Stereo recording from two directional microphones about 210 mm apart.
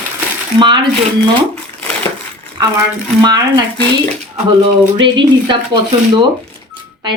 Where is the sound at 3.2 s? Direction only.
20° right (ahead or behind).